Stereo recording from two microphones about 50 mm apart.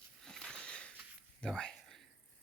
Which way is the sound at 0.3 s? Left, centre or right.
Centre.